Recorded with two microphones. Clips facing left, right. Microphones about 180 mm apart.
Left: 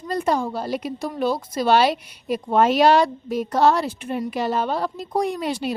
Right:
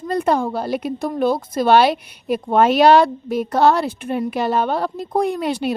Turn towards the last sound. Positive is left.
turn(degrees=-60)  # may be behind; listen again after turning